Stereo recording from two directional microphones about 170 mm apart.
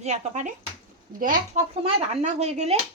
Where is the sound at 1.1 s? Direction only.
55° right (ahead or behind).